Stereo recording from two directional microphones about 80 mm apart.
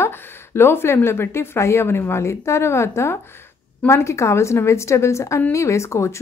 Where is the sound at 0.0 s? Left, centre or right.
Left.